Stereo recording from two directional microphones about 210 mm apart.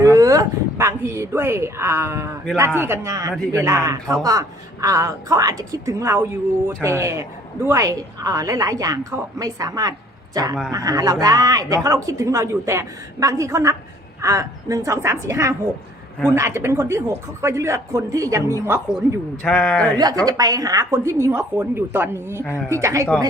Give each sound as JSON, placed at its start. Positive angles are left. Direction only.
{"t": 0.0, "sound": "a sound", "side_deg": -15}
{"t": 2.7, "sound": "a woman's voice", "side_deg": -10}
{"t": 3.3, "sound": "speech", "side_deg": 5}
{"t": 3.6, "sound": "a woman's voice", "side_deg": -15}
{"t": 19.5, "sound": "speech", "side_deg": 5}
{"t": 20.2, "sound": "a woman's voice", "side_deg": -15}